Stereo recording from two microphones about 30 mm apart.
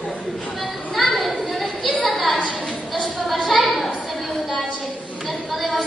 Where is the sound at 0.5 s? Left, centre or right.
Centre.